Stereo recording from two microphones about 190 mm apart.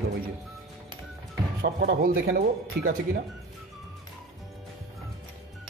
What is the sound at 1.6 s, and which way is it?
Speech, 55° right (ahead or behind).